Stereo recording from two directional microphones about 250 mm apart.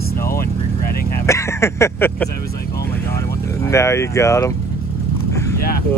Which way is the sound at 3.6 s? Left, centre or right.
Centre.